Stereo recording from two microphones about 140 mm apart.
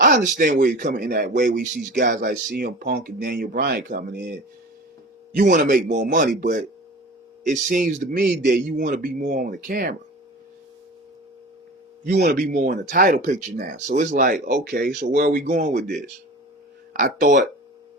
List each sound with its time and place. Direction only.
0.0 s speech: 80° right
5.4 s speech: 70° right (ahead or behind); by 9.9 s 90° right
12.5 s speech: 70° right (ahead or behind)